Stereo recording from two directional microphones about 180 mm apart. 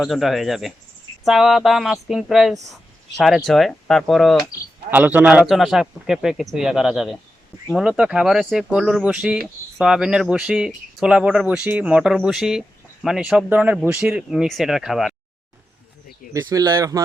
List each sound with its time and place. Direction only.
0.0 s speech: centre (ahead or behind)
4.9 s speech: 10° right (ahead or behind)
16.3 s speech: 15° right (ahead or behind)